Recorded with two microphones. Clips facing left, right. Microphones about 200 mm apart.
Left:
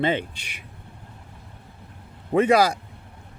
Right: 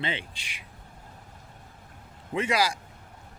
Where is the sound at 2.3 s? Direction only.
55° left (ahead or behind).